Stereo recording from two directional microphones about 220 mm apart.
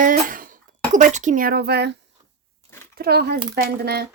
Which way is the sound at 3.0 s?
45° right (ahead or behind).